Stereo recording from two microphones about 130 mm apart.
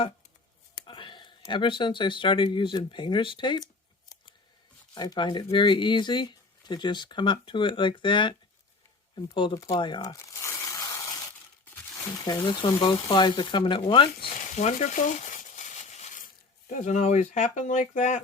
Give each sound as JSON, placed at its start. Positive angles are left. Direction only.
{"t": 0.9, "sound": "speech", "side_deg": 40}
{"t": 4.9, "sound": "speech", "side_deg": 35}
{"t": 9.6, "sound": "crumpling", "side_deg": 40}
{"t": 12.2, "sound": "speech", "side_deg": 35}
{"t": 14.5, "sound": "a sound", "side_deg": 70}